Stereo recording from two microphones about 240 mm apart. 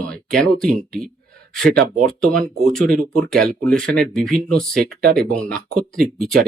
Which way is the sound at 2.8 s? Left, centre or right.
Right.